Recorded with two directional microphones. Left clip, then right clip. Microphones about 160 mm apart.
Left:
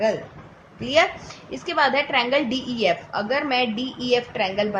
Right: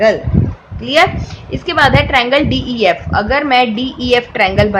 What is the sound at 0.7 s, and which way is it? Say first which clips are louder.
A woman's voice: right 8 dB; 10° right (ahead or behind).